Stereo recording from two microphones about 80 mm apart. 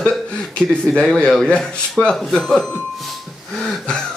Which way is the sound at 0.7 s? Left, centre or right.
Centre.